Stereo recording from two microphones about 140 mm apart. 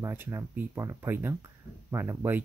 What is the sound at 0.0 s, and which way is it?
Speech, 20° right (ahead or behind).